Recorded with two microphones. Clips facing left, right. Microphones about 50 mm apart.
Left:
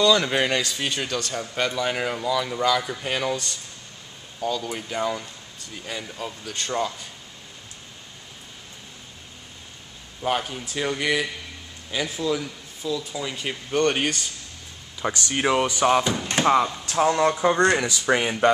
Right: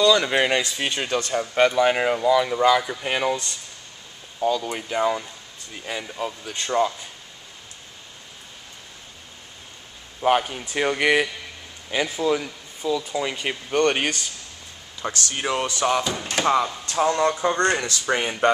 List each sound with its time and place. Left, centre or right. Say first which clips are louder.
0.0 s a man's voice: right 1 dB; centre
0.3 s speech: right 2 dB; centre
10.2 s speech: right 5 dB; right
10.6 s speech: right 4 dB; right
11.9 s speech: right 3 dB; right
15.0 s speech: left 3 dB; centre